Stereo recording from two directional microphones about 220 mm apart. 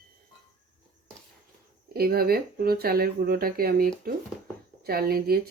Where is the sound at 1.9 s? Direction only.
45° right (ahead or behind).